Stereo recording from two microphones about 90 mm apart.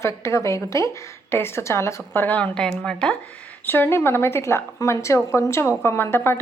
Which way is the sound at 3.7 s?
25° left (ahead or behind).